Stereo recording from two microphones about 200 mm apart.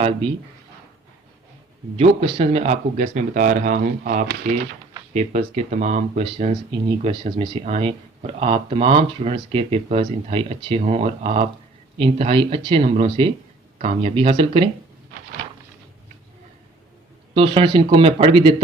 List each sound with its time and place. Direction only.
2.0 s speech: 30° right (ahead or behind)
17.3 s speech: 25° right (ahead or behind)